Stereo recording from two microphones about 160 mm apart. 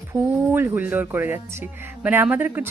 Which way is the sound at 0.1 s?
15° right (ahead or behind).